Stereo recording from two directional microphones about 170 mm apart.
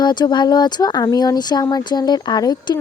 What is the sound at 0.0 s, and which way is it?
A woman's voice, 25° left (ahead or behind).